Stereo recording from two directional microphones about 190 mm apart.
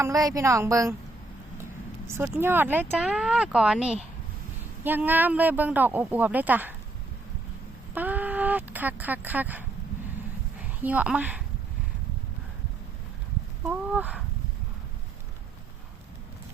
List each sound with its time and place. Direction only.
0.0 s speech: 20° right (ahead or behind)
2.0 s speech: 10° right (ahead or behind)
7.9 s speech: 10° right (ahead or behind)
10.8 s speech: 5° right (ahead or behind)
13.7 s a sound: 10° right (ahead or behind)